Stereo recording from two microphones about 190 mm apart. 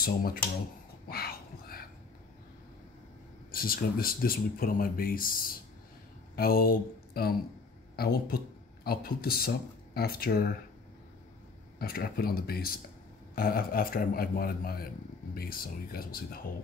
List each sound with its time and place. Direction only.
0.0 s speech: 50° left (ahead or behind)
1.0 s a sound: 55° left (ahead or behind)
3.5 s speech: 50° left (ahead or behind)
6.3 s a sound: 50° left (ahead or behind)
7.9 s speech: 50° left (ahead or behind)
11.8 s speech: 50° left (ahead or behind)